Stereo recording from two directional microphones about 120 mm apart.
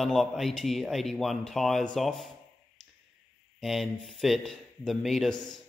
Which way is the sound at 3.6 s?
Centre (ahead or behind).